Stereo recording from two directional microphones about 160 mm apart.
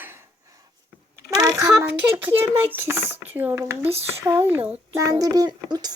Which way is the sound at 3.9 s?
40° right (ahead or behind).